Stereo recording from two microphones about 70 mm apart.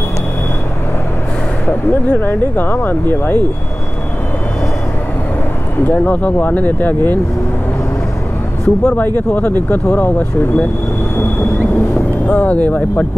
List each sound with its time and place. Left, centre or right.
1.7 s speech: left
5.9 s speech: left
8.6 s speech: centre
9.0 s speech: left
11.1 s vehicle: left